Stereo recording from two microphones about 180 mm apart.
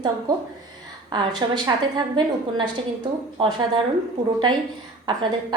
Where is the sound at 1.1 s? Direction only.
25° right (ahead or behind).